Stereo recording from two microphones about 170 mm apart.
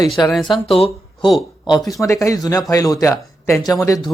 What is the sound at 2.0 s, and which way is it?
Speech, 20° left (ahead or behind).